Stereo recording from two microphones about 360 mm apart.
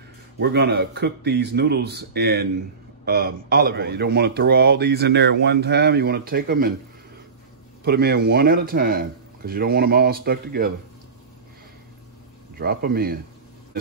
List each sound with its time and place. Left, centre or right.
0.4 s a man's voice: right
7.8 s a man's voice: right
12.5 s a man's voice: right